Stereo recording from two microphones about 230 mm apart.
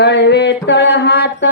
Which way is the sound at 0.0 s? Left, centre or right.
Left.